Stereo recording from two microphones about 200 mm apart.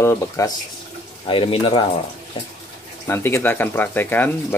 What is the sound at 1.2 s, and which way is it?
Speech, 25° left (ahead or behind).